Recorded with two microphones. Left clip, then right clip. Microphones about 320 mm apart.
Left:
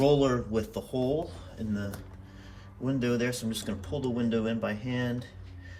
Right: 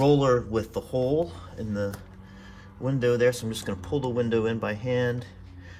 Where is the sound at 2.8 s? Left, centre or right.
Centre.